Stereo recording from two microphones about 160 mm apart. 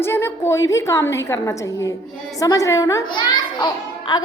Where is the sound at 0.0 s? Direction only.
15° left (ahead or behind).